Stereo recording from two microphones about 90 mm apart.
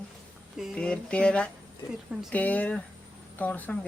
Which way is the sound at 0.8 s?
10° left (ahead or behind).